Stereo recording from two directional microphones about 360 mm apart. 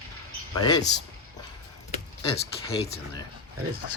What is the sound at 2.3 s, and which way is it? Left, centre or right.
Speech, centre.